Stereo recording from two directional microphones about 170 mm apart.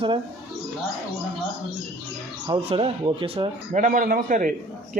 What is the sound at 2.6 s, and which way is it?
Speech, 35° right (ahead or behind).